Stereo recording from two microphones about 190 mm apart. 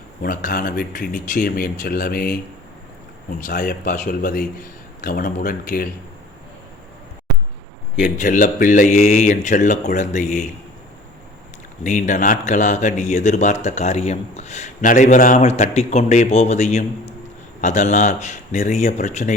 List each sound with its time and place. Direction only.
0.2 s speech: 50° left (ahead or behind)
3.4 s speech: 45° left (ahead or behind)
8.0 s speech: 45° left (ahead or behind)
11.8 s speech: 40° left (ahead or behind)